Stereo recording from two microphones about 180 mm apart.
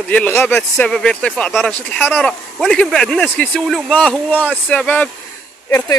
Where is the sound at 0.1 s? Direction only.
10° left (ahead or behind).